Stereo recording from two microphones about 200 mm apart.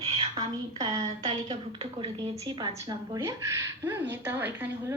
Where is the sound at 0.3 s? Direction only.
20° right (ahead or behind).